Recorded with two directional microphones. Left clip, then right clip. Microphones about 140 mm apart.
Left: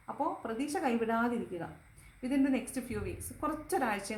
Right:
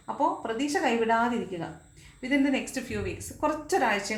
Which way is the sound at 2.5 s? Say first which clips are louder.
Right 5 dB; 25° left (ahead or behind).